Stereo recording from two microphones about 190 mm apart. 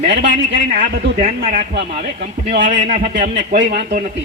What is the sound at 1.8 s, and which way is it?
A man's voice, 35° right (ahead or behind).